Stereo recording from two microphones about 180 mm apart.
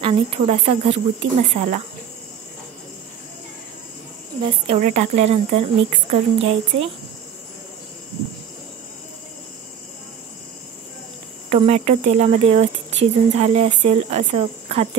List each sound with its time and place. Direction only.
0.0 s speech: 35° right (ahead or behind)
4.4 s speech: 25° right (ahead or behind)
4.7 s speech: 40° right (ahead or behind)
11.4 s speech: 35° right (ahead or behind)